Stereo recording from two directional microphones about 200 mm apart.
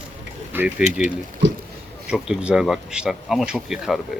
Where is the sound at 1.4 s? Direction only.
65° right (ahead or behind).